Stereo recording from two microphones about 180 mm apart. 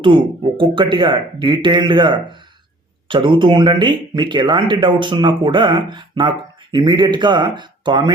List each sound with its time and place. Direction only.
0.0 s speech: 30° right (ahead or behind)